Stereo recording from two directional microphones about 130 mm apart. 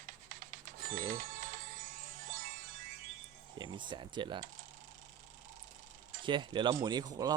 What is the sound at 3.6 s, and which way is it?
Speech, 35° right (ahead or behind).